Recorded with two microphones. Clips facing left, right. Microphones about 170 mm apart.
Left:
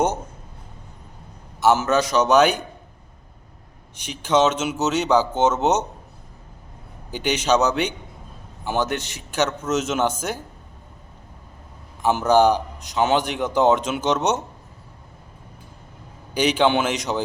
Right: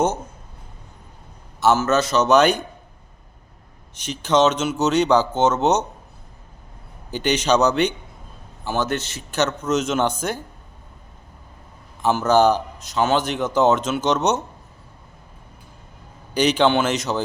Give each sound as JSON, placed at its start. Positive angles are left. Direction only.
{"t": 1.6, "sound": "a man's voice", "side_deg": 15}
{"t": 3.9, "sound": "a man's voice", "side_deg": 10}
{"t": 7.1, "sound": "a man's voice", "side_deg": 10}
{"t": 12.0, "sound": "a man's voice", "side_deg": 15}
{"t": 16.3, "sound": "a man's voice", "side_deg": 10}